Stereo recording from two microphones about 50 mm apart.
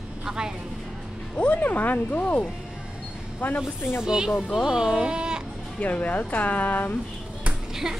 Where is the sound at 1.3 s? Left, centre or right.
Left.